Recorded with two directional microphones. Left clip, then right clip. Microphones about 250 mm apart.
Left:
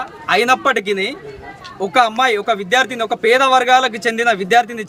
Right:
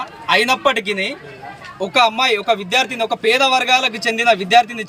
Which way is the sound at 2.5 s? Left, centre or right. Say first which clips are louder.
Left 1 dB; centre.